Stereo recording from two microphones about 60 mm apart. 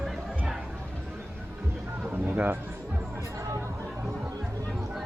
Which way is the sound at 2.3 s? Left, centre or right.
Right.